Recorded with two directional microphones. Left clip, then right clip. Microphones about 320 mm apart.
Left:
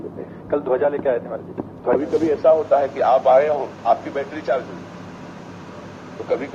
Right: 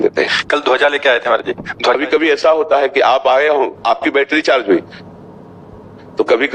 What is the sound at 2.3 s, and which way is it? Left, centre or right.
A man's voice, right.